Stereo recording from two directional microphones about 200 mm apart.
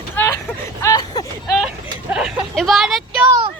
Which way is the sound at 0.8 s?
20° left (ahead or behind).